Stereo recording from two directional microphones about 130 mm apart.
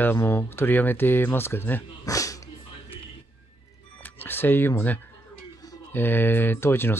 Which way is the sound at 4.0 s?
15° left (ahead or behind).